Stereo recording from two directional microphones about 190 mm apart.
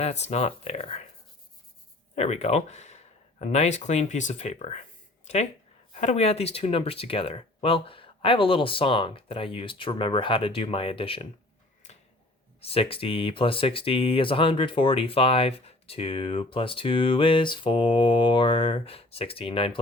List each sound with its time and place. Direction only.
0.0 s speech: 35° left (ahead or behind)
2.1 s speech: 35° left (ahead or behind)
5.9 s speech: 35° left (ahead or behind)
12.6 s speech: 30° left (ahead or behind)